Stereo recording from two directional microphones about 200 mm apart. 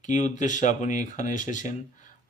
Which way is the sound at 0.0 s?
40° left (ahead or behind).